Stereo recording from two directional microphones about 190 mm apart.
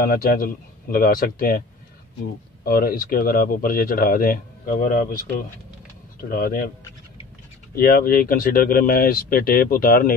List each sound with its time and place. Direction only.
0.0 s speech: 50° left (ahead or behind)
2.6 s speech: 50° left (ahead or behind)
6.3 s speech: 50° left (ahead or behind)
7.7 s speech: 50° left (ahead or behind)